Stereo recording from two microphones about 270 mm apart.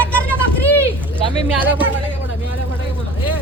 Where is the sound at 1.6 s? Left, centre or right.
Centre.